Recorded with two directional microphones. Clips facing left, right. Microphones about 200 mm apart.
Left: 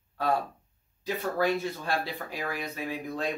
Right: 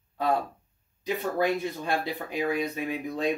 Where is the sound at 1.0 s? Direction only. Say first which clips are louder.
Right 1 dB; 15° right (ahead or behind).